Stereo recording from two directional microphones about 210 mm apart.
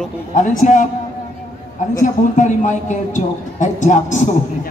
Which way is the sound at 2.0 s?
35° left (ahead or behind).